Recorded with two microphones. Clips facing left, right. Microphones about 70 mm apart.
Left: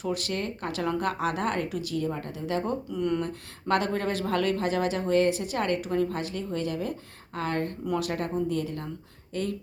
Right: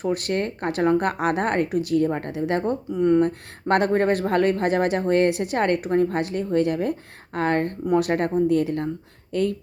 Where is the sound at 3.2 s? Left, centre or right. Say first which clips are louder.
Right 8 dB; right.